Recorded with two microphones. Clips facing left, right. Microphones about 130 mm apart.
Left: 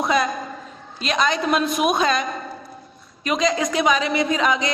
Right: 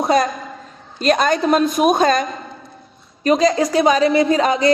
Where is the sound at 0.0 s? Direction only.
40° right (ahead or behind).